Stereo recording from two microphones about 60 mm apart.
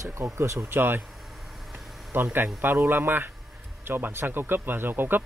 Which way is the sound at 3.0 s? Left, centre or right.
Right.